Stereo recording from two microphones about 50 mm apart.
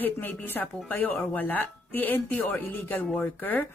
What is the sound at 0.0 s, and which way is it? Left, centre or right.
Speech, left.